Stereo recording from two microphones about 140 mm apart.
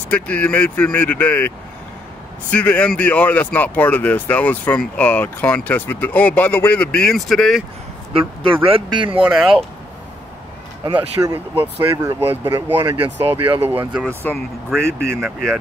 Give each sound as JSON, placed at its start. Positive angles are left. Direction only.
{"t": 0.1, "sound": "speech", "side_deg": 10}
{"t": 2.5, "sound": "speech", "side_deg": 10}
{"t": 8.1, "sound": "speech", "side_deg": -40}
{"t": 9.2, "sound": "speech", "side_deg": -5}
{"t": 11.3, "sound": "speech", "side_deg": -20}
{"t": 14.0, "sound": "speech", "side_deg": 10}
{"t": 15.1, "sound": "speech", "side_deg": 0}